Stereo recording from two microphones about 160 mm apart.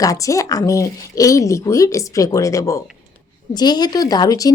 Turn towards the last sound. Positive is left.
turn(degrees=25)  # may be behind; listen again after turning